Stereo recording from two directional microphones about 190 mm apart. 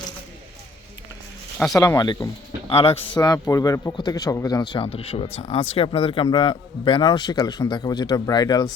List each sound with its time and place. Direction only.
1.7 s speech: 20° left (ahead or behind)
2.6 s a man's voice: 30° left (ahead or behind)